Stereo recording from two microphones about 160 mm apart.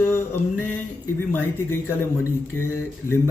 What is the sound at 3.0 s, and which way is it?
Male singing, 15° left (ahead or behind).